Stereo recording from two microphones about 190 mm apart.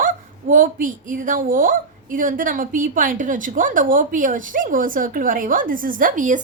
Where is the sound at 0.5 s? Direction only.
45° right (ahead or behind).